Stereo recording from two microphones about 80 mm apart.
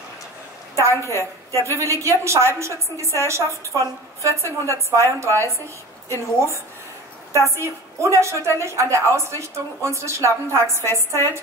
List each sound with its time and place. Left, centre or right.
0.8 s a woman's voice: left
1.6 s a woman's voice: right